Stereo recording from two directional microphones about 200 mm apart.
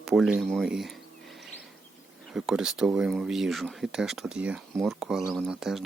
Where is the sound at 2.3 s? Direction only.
5° right (ahead or behind).